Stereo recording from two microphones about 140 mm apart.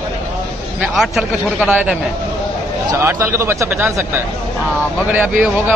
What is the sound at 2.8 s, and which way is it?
A man's voice, 20° right (ahead or behind).